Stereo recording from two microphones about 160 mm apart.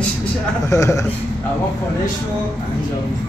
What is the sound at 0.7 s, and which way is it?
Speech, 20° left (ahead or behind).